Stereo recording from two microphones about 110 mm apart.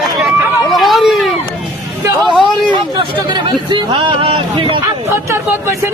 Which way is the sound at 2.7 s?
45° right (ahead or behind).